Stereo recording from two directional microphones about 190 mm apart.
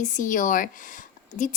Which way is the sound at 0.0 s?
40° left (ahead or behind).